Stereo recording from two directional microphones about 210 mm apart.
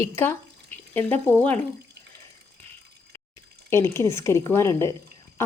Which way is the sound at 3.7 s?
10° left (ahead or behind).